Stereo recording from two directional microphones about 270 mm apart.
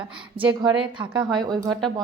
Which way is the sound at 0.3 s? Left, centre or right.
Centre.